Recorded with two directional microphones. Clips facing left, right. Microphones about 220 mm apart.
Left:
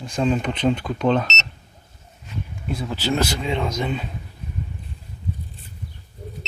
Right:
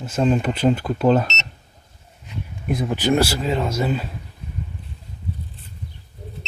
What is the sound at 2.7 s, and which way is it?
Speech, 20° right (ahead or behind).